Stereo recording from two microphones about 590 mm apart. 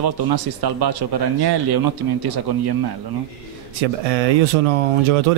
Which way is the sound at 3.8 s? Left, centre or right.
Right.